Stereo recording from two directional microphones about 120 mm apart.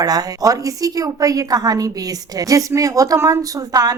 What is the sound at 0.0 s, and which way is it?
A woman's voice, 30° right (ahead or behind).